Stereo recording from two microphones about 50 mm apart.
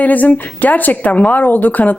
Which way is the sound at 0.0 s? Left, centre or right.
Left.